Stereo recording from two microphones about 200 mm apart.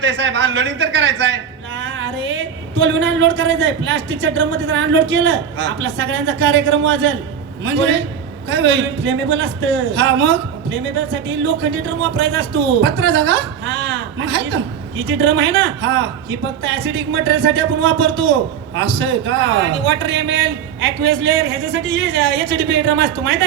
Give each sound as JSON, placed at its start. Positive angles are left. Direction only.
{"t": 0.0, "sound": "a man's voice", "side_deg": -65}